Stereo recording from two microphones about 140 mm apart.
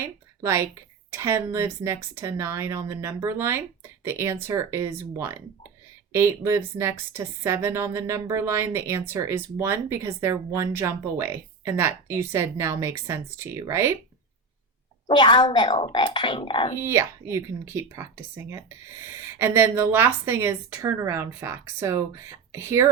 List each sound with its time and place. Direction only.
0.0 s a woman's voice: 20° right (ahead or behind)
15.1 s speech: 30° left (ahead or behind)
16.8 s speech: 15° right (ahead or behind)